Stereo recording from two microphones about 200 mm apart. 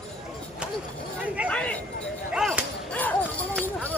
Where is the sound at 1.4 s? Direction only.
5° left (ahead or behind).